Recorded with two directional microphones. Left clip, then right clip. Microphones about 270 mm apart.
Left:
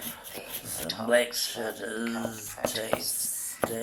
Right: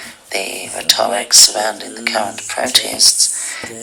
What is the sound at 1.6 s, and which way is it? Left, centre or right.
Speech, right.